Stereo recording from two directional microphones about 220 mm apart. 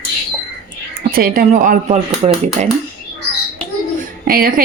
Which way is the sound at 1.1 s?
40° right (ahead or behind).